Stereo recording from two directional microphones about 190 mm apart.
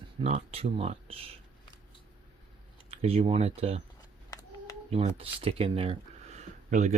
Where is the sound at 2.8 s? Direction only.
30° right (ahead or behind).